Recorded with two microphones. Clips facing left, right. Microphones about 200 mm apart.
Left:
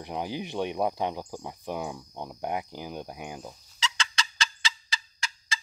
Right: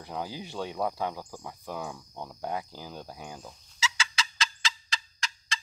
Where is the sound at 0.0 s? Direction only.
20° left (ahead or behind).